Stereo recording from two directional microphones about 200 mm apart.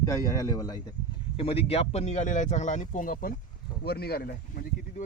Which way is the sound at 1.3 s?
30° left (ahead or behind).